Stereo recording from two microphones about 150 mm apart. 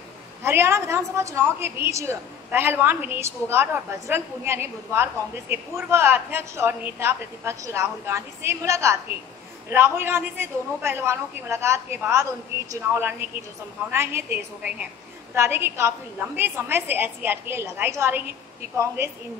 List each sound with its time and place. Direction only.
0.4 s a woman's voice: 15° right (ahead or behind)